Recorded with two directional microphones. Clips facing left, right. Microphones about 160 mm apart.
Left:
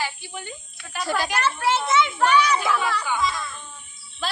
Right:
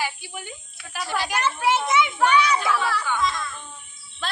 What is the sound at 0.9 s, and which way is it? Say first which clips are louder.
Speech: left 3 dB; 5° right (ahead or behind).